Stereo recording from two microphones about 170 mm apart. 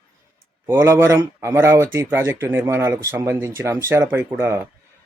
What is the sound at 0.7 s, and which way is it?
Speech, 10° right (ahead or behind).